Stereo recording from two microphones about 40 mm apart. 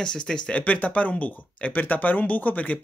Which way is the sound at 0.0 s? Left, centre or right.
Centre.